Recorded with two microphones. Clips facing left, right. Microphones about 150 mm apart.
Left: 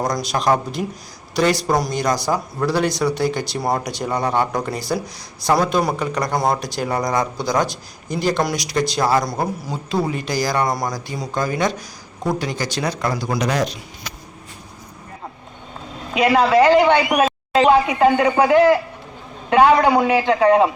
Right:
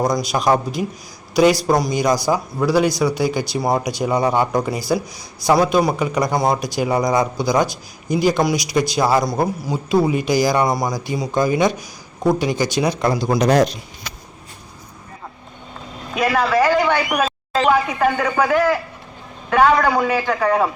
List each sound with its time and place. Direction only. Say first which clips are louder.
0.0 s speech: right 2 dB; 5° right (ahead or behind); by 13.5 s 25° right (ahead or behind)
16.1 s a man's voice: left 3 dB; 20° left (ahead or behind)